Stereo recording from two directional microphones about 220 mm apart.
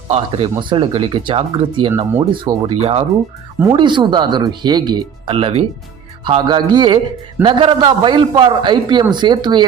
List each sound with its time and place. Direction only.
0.1 s a man's voice: 25° right (ahead or behind)